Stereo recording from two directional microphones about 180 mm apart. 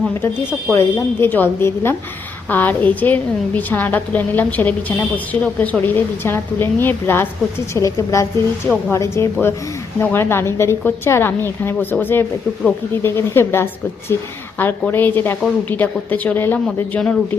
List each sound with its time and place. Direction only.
0.7 s a woman's voice: 15° left (ahead or behind)